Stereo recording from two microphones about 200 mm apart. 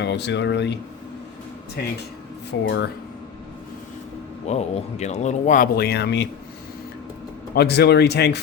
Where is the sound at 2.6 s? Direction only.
65° left (ahead or behind).